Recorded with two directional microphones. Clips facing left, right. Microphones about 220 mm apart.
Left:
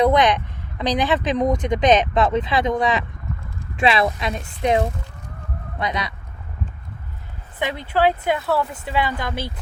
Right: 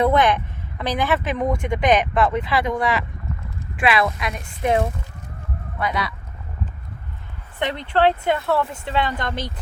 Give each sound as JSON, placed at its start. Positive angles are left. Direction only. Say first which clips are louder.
{"t": 0.0, "sound": "speech", "louder": "left 1 dB", "side_deg": 15}
{"t": 5.8, "sound": "speech", "louder": "right 1 dB", "side_deg": 20}
{"t": 7.6, "sound": "speech", "louder": "right 1 dB", "side_deg": 5}